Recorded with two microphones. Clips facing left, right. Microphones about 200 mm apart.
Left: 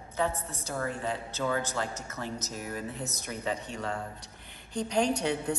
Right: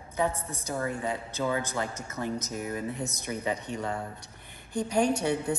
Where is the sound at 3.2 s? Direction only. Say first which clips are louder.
Right 2 dB; 15° right (ahead or behind).